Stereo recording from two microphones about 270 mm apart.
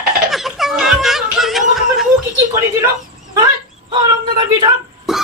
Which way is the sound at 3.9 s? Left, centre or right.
Centre.